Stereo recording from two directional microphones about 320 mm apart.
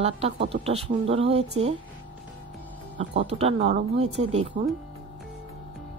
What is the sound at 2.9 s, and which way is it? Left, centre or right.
A woman's voice, centre.